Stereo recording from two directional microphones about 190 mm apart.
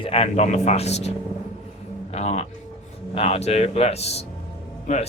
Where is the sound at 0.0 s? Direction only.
30° left (ahead or behind).